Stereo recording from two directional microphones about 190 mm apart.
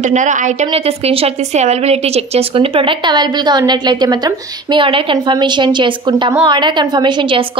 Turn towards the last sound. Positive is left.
turn(degrees=-25)  # may be behind; listen again after turning